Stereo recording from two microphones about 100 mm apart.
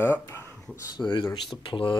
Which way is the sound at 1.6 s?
60° left (ahead or behind).